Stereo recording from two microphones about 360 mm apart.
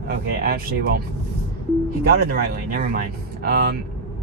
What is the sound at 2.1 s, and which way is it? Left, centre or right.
Speech, right.